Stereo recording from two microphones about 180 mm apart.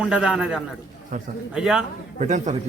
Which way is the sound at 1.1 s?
45° right (ahead or behind).